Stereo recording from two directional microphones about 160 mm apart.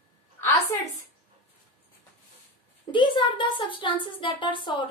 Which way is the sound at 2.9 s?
30° left (ahead or behind).